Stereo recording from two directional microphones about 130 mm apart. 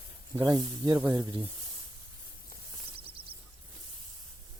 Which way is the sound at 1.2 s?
40° right (ahead or behind).